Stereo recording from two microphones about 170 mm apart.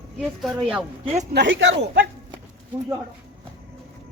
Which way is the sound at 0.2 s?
Centre (ahead or behind).